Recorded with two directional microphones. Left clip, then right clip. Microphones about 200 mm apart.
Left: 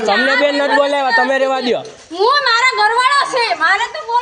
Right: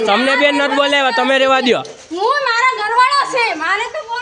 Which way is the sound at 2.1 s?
20° left (ahead or behind).